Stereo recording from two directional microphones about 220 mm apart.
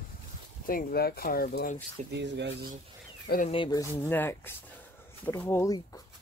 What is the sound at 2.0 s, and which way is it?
Speech, 50° right (ahead or behind).